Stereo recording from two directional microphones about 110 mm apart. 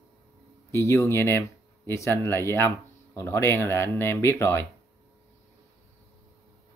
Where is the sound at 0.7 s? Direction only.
25° left (ahead or behind).